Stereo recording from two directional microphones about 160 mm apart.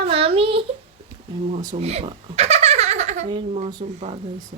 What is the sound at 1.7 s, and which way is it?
Giggle, 40° right (ahead or behind).